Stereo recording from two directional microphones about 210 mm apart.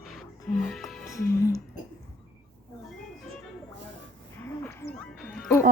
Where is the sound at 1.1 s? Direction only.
15° left (ahead or behind).